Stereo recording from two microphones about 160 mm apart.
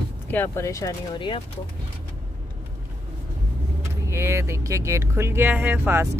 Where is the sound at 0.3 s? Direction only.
15° left (ahead or behind).